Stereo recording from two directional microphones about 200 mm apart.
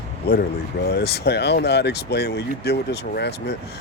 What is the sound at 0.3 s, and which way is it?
Speech, 55° left (ahead or behind).